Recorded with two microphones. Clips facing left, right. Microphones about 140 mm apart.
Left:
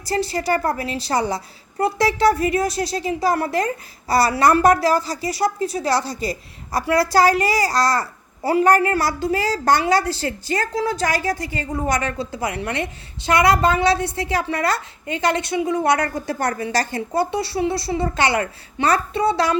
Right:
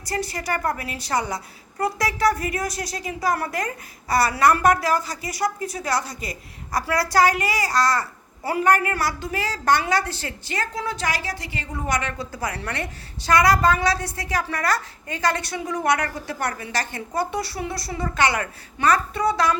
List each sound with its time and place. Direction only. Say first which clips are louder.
0.0 s a woman's voice: left 6 dB; 30° left (ahead or behind)
12.1 s a woman's voice: left 4 dB; 25° left (ahead or behind)